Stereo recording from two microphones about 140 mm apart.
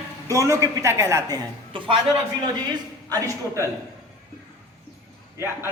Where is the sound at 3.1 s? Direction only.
25° right (ahead or behind).